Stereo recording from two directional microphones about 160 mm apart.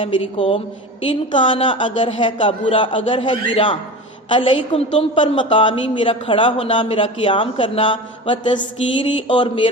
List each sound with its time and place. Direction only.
0.0 s a woman's voice: 35° left (ahead or behind)